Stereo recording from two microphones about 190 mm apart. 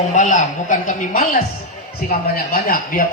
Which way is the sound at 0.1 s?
40° left (ahead or behind).